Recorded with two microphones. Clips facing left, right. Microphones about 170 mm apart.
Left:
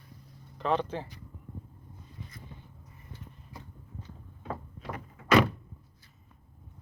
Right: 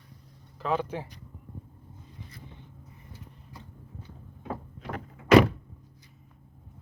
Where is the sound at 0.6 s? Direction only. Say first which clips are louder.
Even; 5° right (ahead or behind).